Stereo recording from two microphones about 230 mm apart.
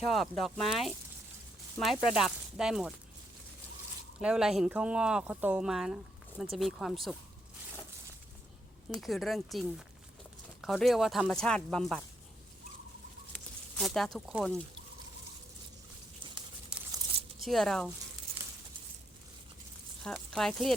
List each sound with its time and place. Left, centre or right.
0.1 s speech: centre
4.2 s speech: centre
8.9 s speech: centre
13.3 s speech: centre
16.2 s a sound: right
16.9 s crumpling: right
17.4 s speech: centre
20.1 s speech: centre